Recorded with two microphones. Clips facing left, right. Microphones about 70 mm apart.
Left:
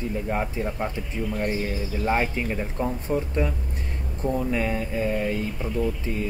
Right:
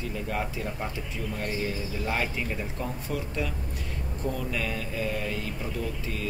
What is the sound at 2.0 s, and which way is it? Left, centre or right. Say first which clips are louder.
Speech: left 6 dB; left.